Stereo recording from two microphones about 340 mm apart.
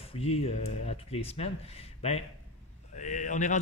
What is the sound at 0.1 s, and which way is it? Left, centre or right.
Speech, centre.